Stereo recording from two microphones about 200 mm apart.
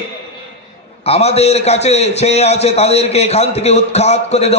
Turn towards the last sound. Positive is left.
turn(degrees=30)  # may be behind; listen again after turning